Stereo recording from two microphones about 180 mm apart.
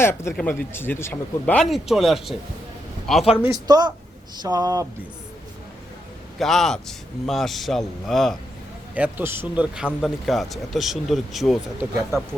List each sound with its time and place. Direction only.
0.0 s speech: 15° left (ahead or behind)
1.7 s speech: centre (ahead or behind)
3.4 s speech: 20° right (ahead or behind)
6.4 s speech: centre (ahead or behind)
9.0 s speech: 10° right (ahead or behind)